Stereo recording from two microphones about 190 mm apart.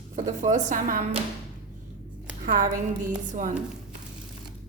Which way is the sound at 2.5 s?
45° right (ahead or behind).